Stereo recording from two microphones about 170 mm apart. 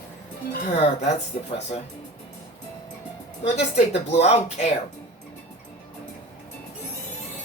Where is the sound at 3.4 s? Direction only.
40° left (ahead or behind).